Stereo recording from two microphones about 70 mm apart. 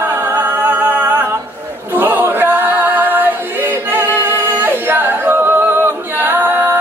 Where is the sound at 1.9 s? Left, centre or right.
Right.